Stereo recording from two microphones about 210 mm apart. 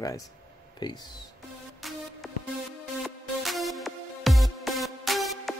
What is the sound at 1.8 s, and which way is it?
Music, centre (ahead or behind).